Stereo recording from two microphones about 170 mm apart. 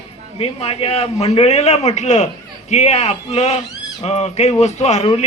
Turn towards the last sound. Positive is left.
turn(degrees=35)  # may be behind; listen again after turning